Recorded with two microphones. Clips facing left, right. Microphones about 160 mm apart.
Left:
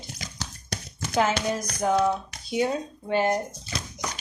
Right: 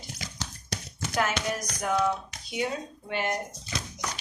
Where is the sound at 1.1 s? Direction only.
25° left (ahead or behind).